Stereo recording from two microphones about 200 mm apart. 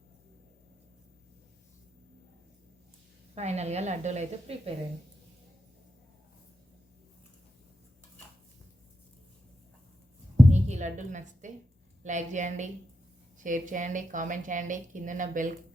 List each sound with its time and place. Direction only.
3.3 s speech: 35° right (ahead or behind)
10.5 s a woman's voice: 35° right (ahead or behind)